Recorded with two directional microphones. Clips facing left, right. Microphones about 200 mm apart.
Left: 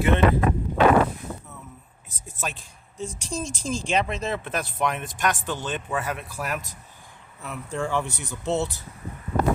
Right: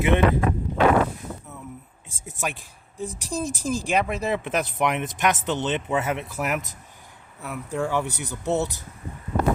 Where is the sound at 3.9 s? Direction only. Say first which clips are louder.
Right 1 dB; 10° right (ahead or behind).